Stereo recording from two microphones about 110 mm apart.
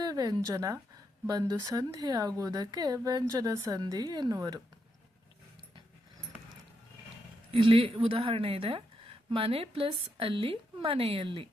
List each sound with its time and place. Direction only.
0.0 s speech: 35° right (ahead or behind)
7.5 s a woman's voice: 55° right (ahead or behind)